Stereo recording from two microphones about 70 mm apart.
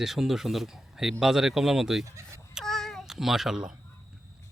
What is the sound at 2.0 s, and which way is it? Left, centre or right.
Speech, right.